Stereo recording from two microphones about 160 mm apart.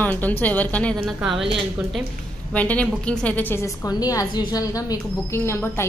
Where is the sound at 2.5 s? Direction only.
10° left (ahead or behind).